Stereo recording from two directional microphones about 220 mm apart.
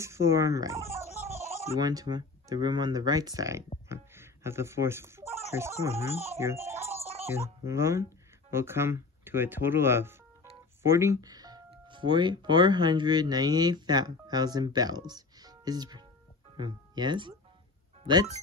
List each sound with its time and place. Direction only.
0.0 s a child's voice: 10° right (ahead or behind)
7.0 s music: 30° right (ahead or behind)
7.2 s speech: 10° right (ahead or behind)